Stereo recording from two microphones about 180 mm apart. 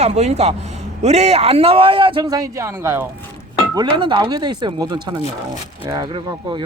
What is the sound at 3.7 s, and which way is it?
A man's voice, 25° right (ahead or behind).